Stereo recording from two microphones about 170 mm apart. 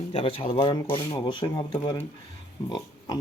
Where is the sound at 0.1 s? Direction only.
35° left (ahead or behind).